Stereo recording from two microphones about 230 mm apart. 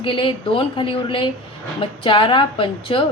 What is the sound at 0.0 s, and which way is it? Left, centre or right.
A woman's voice, left.